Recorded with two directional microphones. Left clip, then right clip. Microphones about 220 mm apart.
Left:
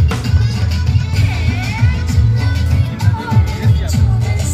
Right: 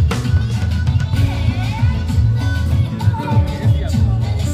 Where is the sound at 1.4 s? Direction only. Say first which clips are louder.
Left 3 dB; 35° left (ahead or behind).